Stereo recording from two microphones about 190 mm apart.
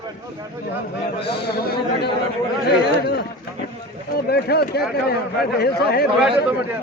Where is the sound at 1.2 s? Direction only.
60° left (ahead or behind).